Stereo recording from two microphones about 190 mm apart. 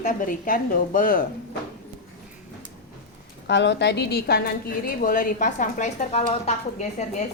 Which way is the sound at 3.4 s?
65° left (ahead or behind).